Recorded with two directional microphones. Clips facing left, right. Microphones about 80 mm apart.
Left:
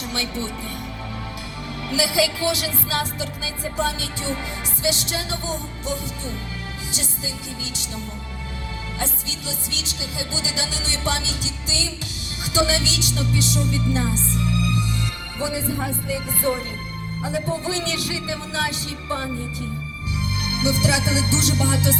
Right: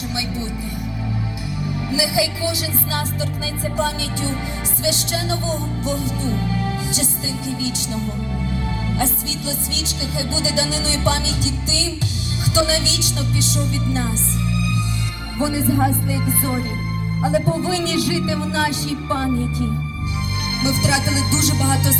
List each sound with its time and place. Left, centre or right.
0.1 s speech: centre
1.6 s music: right
9.0 s music: right
15.4 s music: right
19.0 s speech: right
20.6 s music: right